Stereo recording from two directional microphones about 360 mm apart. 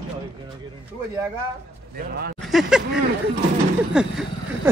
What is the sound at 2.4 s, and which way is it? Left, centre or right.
Speech, centre.